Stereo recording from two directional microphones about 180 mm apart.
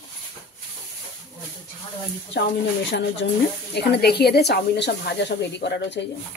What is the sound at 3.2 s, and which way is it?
Speech, 75° left (ahead or behind).